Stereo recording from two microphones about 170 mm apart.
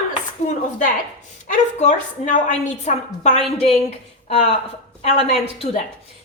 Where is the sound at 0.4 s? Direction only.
50° left (ahead or behind).